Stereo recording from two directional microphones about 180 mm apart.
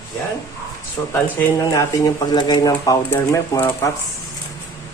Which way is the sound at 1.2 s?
15° left (ahead or behind).